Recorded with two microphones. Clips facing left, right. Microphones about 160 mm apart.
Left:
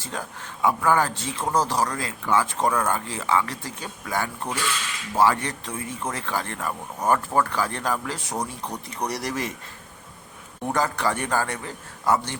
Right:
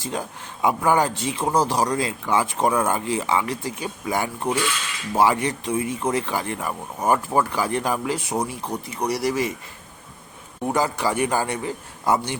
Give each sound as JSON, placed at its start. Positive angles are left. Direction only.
{"t": 0.0, "sound": "speech", "side_deg": -15}
{"t": 10.7, "sound": "speech", "side_deg": -10}